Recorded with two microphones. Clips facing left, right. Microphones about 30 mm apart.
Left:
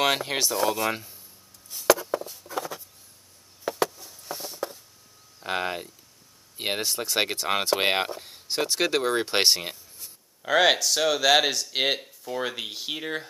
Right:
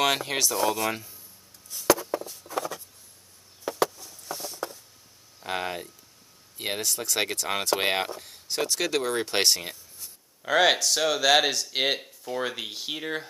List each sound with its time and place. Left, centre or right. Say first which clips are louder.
0.0 s speech: left 1 dB; centre
1.8 s a sound: left 2 dB; centre
3.8 s a sound: right 2 dB; centre
5.4 s speech: left 2 dB; centre
6.5 s speech: left 2 dB; left
10.0 s speech: left 1 dB; centre